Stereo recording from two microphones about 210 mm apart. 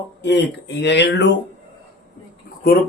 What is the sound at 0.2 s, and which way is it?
Speech, 55° left (ahead or behind).